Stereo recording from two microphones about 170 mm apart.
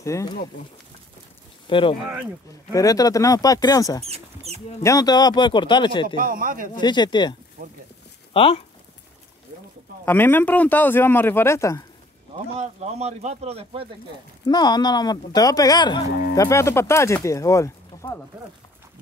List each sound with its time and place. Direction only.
0.0 s speech: 20° left (ahead or behind)
1.7 s speech: 30° left (ahead or behind)
6.1 s speech: 55° right (ahead or behind)
6.7 s speech: 25° left (ahead or behind)
10.0 s speech: 10° left (ahead or behind)
12.5 s speech: 40° right (ahead or behind)
14.4 s speech: 25° left (ahead or behind)